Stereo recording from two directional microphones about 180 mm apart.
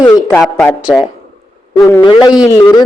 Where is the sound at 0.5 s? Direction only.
15° left (ahead or behind).